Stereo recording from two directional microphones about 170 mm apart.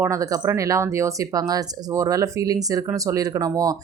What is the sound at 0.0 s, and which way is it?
Speech, 20° right (ahead or behind).